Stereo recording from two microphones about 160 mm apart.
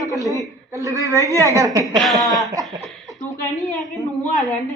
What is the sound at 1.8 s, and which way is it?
Speech, centre (ahead or behind).